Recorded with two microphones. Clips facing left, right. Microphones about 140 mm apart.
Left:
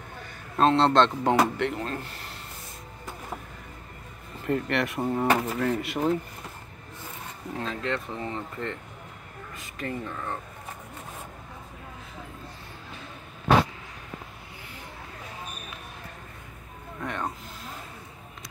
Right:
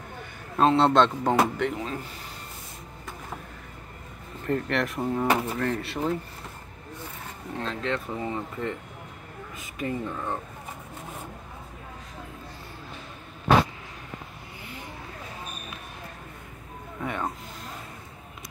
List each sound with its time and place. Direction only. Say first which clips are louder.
0.6 s speech: even; 5° right (ahead or behind)
4.5 s speech: even; centre (ahead or behind)
7.5 s speech: right 1 dB; centre (ahead or behind)
9.8 s speech: right 3 dB; 15° right (ahead or behind)
17.0 s speech: right 1 dB; 5° right (ahead or behind)